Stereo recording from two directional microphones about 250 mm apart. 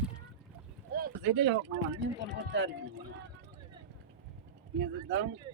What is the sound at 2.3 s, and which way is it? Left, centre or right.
Speech, right.